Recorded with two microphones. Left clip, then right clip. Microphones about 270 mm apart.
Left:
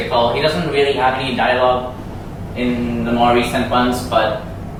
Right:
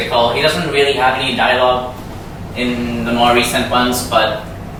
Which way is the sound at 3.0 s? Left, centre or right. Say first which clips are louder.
Right 2 dB; centre.